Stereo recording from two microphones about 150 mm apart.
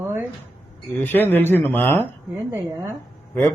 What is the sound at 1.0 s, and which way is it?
A man's voice, 15° left (ahead or behind).